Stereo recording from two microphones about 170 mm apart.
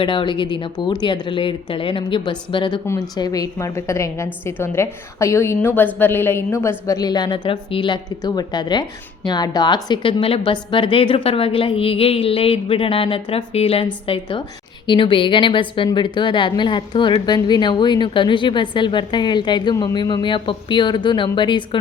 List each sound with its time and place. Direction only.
0.0 s a woman's voice: 30° left (ahead or behind)
2.8 s a woman's voice: 20° left (ahead or behind)